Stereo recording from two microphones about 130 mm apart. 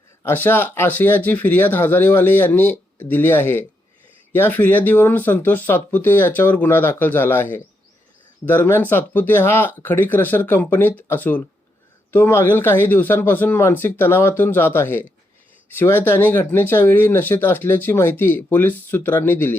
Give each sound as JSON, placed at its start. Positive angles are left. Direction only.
{"t": 0.2, "sound": "speech", "side_deg": 15}